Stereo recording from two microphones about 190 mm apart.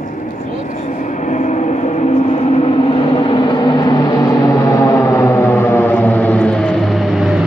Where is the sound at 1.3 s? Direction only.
40° left (ahead or behind).